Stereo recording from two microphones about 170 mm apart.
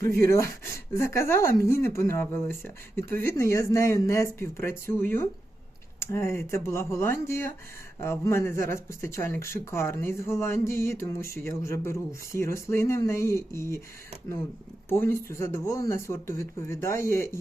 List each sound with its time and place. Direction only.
0.3 s speech: 15° left (ahead or behind)
14.8 s speech: 15° left (ahead or behind)